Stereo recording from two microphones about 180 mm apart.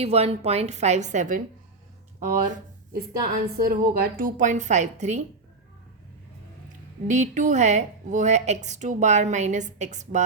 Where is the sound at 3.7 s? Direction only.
55° right (ahead or behind).